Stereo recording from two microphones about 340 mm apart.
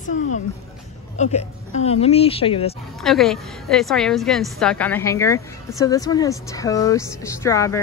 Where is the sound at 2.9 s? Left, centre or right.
Centre.